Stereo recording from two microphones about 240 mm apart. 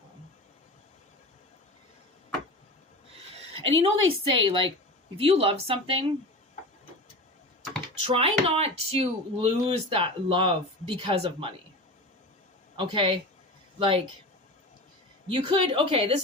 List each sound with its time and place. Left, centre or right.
3.7 s speech: right
8.0 s speech: right
12.7 s speech: right
15.3 s speech: right